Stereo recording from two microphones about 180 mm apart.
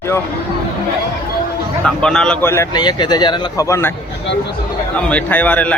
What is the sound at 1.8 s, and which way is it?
Speech, 5° left (ahead or behind).